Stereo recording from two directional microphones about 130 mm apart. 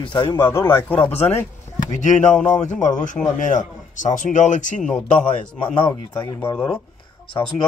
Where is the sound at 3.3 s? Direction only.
75° left (ahead or behind).